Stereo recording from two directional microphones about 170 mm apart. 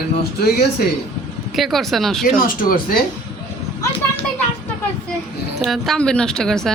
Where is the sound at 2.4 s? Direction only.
55° left (ahead or behind).